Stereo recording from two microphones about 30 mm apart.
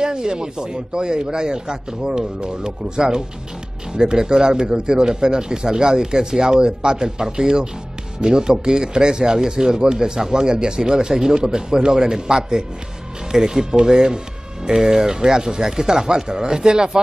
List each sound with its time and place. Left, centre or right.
0.0 s speech: right